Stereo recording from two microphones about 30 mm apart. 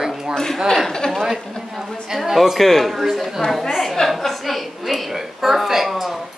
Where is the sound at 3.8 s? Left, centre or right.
Centre.